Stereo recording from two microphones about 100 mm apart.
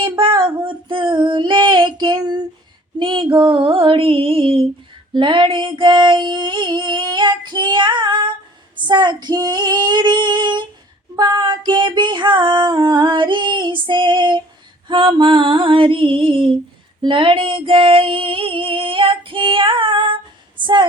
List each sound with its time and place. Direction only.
0.0 s female singing: 55° right (ahead or behind)
3.0 s female singing: 60° right (ahead or behind)
5.1 s female singing: 55° right (ahead or behind)
20.6 s a woman's voice: 50° right (ahead or behind)